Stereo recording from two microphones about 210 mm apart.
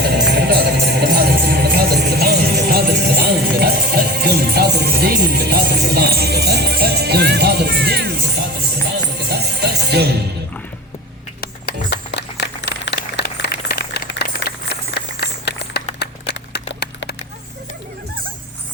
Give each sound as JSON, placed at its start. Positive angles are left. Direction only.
{"t": 0.1, "sound": "music", "side_deg": -50}
{"t": 9.1, "sound": "music", "side_deg": -50}
{"t": 11.3, "sound": "music", "side_deg": 50}
{"t": 12.6, "sound": "a sound", "side_deg": 55}